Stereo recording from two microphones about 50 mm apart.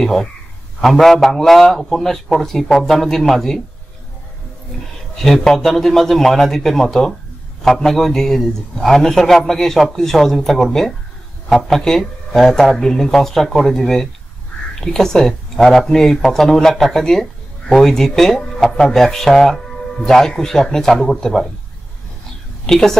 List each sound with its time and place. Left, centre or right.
0.0 s speech: centre
5.1 s speech: centre
22.7 s speech: centre